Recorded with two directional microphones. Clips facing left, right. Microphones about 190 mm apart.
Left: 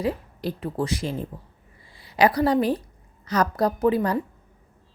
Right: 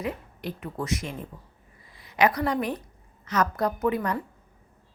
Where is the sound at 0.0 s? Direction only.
30° left (ahead or behind).